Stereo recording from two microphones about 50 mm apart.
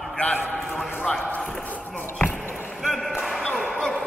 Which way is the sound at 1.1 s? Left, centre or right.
Left.